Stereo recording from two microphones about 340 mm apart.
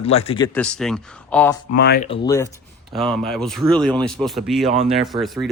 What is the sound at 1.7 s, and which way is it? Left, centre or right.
Speech, left.